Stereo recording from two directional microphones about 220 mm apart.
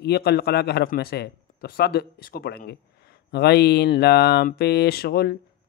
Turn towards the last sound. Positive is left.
turn(degrees=45)  # may be behind; listen again after turning